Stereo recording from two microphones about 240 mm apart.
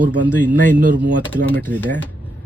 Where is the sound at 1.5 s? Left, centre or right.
Centre.